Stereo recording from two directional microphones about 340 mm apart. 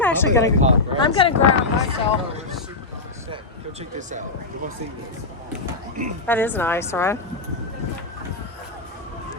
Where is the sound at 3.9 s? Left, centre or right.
Right.